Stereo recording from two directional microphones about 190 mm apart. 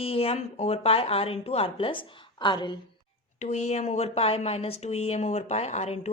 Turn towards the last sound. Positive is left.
turn(degrees=35)  # may be behind; listen again after turning